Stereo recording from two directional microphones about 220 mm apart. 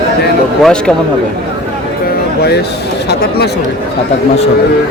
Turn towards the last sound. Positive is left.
turn(degrees=45)  # may be behind; listen again after turning